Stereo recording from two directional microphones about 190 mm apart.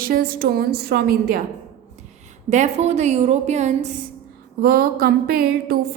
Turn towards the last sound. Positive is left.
turn(degrees=-55)  # may be behind; listen again after turning